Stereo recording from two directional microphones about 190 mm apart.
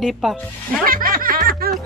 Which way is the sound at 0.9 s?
50° right (ahead or behind).